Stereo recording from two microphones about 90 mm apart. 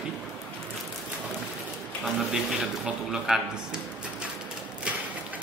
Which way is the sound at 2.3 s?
5° right (ahead or behind).